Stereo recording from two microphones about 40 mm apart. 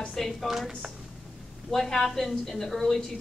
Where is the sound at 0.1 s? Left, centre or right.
Centre.